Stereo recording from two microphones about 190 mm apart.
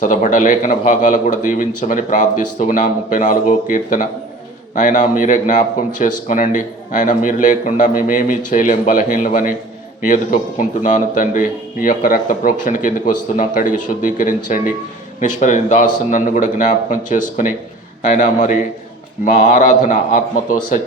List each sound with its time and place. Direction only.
0.0 s speech: 45° left (ahead or behind)
10.6 s speech: 45° left (ahead or behind)